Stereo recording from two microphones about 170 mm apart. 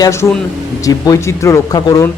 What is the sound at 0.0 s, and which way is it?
A man's voice, 15° left (ahead or behind).